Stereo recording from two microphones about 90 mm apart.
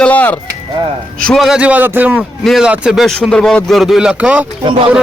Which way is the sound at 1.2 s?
Centre (ahead or behind).